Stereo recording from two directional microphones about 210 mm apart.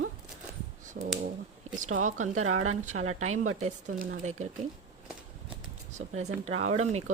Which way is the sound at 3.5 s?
35° right (ahead or behind).